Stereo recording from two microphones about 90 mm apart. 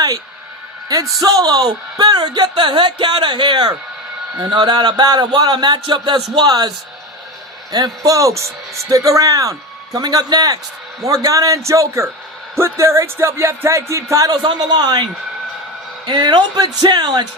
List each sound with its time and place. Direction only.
1.2 s speech: 45° right (ahead or behind)
2.6 s speech: 65° right (ahead or behind)
7.7 s speech: 45° right (ahead or behind)
14.4 s speech: 50° right (ahead or behind)
16.0 s speech: 50° right (ahead or behind)